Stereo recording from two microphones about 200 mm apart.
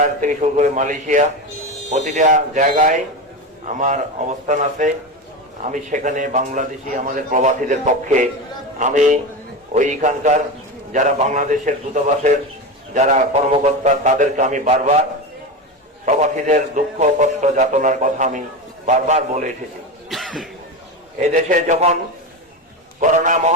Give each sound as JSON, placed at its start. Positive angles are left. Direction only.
{"t": 0.0, "sound": "a man's voice", "side_deg": -40}
{"t": 16.0, "sound": "a man's voice", "side_deg": -35}
{"t": 20.1, "sound": "cough", "side_deg": 0}
{"t": 21.2, "sound": "a man's voice", "side_deg": -40}
{"t": 23.0, "sound": "a man's voice", "side_deg": -40}